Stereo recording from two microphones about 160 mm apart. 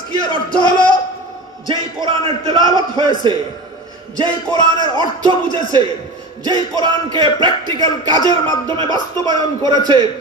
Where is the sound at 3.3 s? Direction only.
30° right (ahead or behind).